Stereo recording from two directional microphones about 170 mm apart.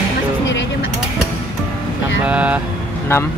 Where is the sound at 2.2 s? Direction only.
10° right (ahead or behind).